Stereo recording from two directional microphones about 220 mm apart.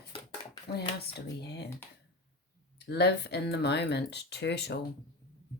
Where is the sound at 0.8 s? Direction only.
50° left (ahead or behind).